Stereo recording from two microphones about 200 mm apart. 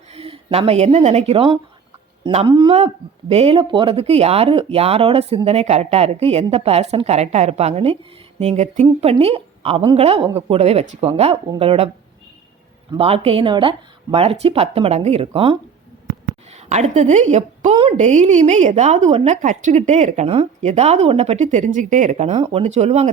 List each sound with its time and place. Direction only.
0.1 s speech: 30° right (ahead or behind)
12.9 s speech: 30° right (ahead or behind)
16.6 s a woman's voice: 35° right (ahead or behind)